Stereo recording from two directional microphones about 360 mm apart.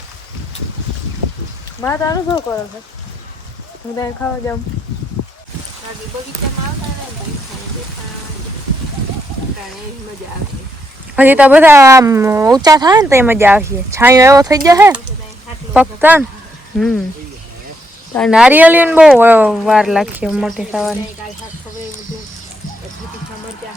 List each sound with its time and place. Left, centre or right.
1.8 s speech: centre
3.9 s speech: centre
5.2 s a sound: left
11.2 s speech: centre
18.1 s speech: centre